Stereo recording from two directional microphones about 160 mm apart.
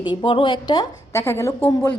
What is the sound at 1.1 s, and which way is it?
Speech, 15° left (ahead or behind).